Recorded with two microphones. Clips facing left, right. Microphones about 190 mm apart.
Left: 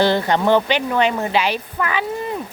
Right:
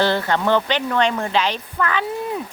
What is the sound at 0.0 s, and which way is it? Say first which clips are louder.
Speech: left 2 dB; 15° left (ahead or behind).